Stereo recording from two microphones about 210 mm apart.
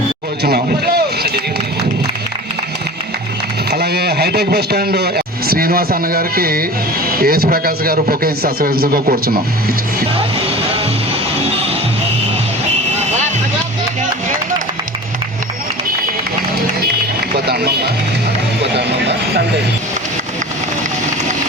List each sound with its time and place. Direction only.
0.4 s speech: 45° right (ahead or behind)
3.7 s a man's voice: 50° right (ahead or behind)
17.3 s music: 50° right (ahead or behind)